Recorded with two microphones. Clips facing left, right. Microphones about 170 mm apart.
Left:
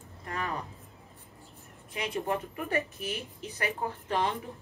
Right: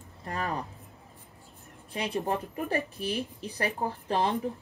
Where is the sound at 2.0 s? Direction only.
30° right (ahead or behind).